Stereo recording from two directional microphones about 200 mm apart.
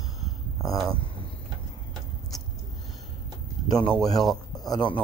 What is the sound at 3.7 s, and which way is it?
Speech, 20° left (ahead or behind).